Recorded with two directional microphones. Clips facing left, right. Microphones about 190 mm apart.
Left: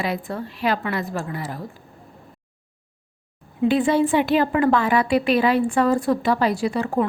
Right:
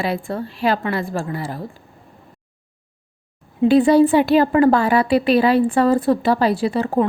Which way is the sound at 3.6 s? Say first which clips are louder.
Right 6 dB; 35° right (ahead or behind).